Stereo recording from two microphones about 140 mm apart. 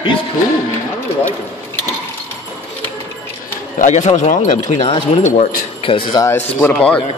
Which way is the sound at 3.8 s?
55° left (ahead or behind).